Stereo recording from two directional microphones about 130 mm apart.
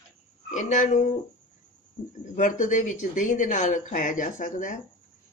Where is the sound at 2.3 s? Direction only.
80° left.